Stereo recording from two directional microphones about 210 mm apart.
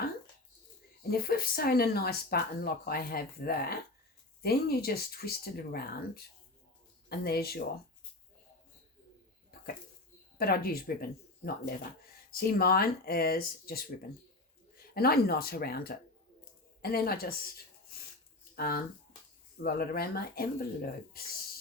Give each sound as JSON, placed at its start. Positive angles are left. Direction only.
{"t": 1.1, "sound": "speech", "side_deg": 45}
{"t": 10.3, "sound": "speech", "side_deg": 45}
{"t": 14.9, "sound": "speech", "side_deg": 45}
{"t": 18.5, "sound": "speech", "side_deg": 45}